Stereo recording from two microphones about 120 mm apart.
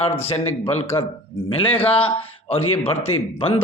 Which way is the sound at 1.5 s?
50° left (ahead or behind).